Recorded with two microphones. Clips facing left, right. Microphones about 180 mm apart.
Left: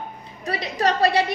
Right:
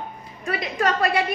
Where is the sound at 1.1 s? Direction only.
75° left (ahead or behind).